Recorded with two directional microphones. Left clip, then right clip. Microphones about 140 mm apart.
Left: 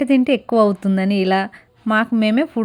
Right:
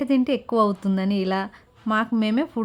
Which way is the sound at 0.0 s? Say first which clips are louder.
Left 6 dB; 25° left (ahead or behind).